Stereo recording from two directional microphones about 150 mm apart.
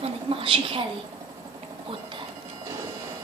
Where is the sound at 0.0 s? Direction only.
35° right (ahead or behind).